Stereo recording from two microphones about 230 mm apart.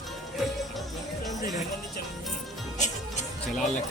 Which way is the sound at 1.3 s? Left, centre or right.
Left.